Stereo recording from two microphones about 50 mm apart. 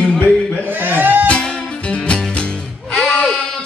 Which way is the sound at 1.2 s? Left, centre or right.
Left.